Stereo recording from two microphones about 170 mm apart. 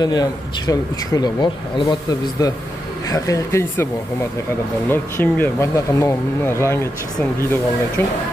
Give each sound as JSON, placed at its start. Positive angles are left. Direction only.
{"t": 0.0, "sound": "speech", "side_deg": 25}
{"t": 8.0, "sound": "speech", "side_deg": 10}